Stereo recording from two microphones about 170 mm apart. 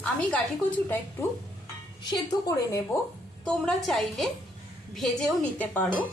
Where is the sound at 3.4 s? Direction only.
Centre (ahead or behind).